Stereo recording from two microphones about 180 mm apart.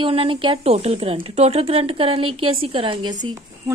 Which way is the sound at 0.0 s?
30° right (ahead or behind).